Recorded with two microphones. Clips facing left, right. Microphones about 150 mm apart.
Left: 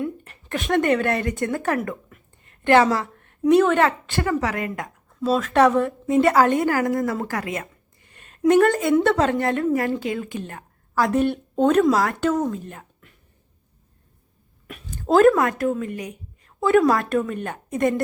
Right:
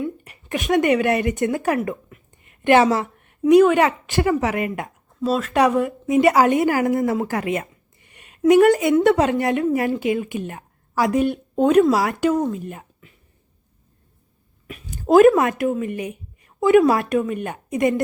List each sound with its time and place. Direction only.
0.3 s a woman's voice: 15° right (ahead or behind)
2.3 s a sound: 15° right (ahead or behind)
3.4 s a woman's voice: 10° right (ahead or behind)
5.2 s a woman's voice: centre (ahead or behind)
14.9 s speech: 15° right (ahead or behind)